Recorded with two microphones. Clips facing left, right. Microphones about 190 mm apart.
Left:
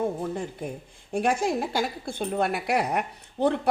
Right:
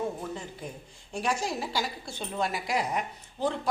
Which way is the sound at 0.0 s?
50° left (ahead or behind).